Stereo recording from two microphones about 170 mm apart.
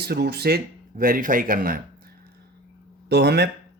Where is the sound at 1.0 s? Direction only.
55° right (ahead or behind).